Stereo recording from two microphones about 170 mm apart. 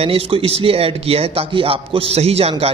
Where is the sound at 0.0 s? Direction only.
35° right (ahead or behind).